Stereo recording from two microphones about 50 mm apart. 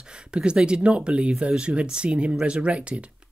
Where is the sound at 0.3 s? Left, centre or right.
Centre.